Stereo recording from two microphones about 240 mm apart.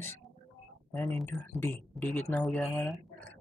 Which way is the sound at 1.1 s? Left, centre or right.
Centre.